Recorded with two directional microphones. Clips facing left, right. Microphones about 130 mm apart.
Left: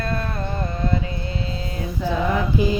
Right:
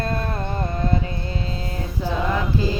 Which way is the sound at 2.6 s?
15° left (ahead or behind).